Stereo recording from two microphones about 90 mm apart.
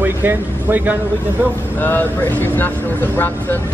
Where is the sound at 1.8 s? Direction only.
20° left (ahead or behind).